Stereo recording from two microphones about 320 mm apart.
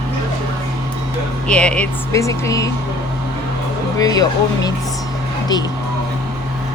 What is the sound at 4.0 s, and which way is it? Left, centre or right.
Speech, centre.